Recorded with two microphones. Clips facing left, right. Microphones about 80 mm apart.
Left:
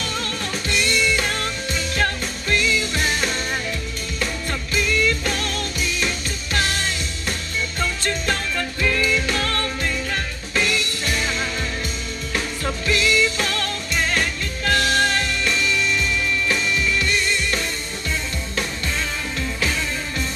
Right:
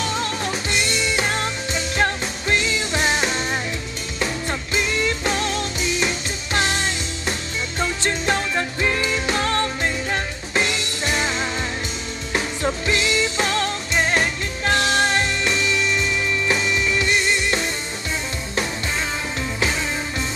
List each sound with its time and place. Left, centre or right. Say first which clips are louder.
1.2 s music: right 2 dB; right
4.5 s music: even; right
6.5 s music: right 2 dB; right
8.3 s music: right 2 dB; right
12.8 s music: left 5 dB; right
17.0 s music: right 2 dB; centre